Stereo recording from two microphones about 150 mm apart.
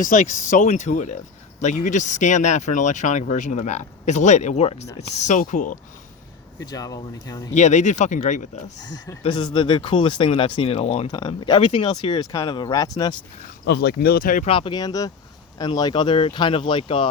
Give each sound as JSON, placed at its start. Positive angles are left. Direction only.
{"t": 0.0, "sound": "speech", "side_deg": 60}
{"t": 6.6, "sound": "speech", "side_deg": 25}
{"t": 7.5, "sound": "speech", "side_deg": 50}
{"t": 9.2, "sound": "speech", "side_deg": 35}
{"t": 13.7, "sound": "speech", "side_deg": 90}
{"t": 14.4, "sound": "speech", "side_deg": 35}